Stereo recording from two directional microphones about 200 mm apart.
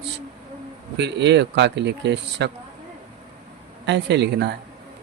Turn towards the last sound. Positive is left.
turn(degrees=-60)  # may be behind; listen again after turning